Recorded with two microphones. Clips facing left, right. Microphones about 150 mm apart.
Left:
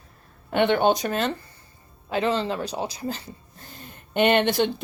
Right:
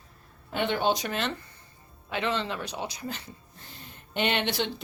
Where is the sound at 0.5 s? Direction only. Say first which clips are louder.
Left 7 dB; 65° left (ahead or behind); by 3.2 s 35° left (ahead or behind).